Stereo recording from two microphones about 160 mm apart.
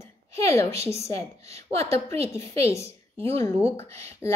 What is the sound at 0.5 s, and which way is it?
Speech, 20° left (ahead or behind).